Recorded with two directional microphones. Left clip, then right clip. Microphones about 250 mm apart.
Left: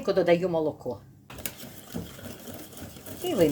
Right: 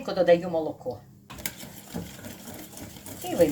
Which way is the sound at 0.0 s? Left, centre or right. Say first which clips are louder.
Right 2 dB; left.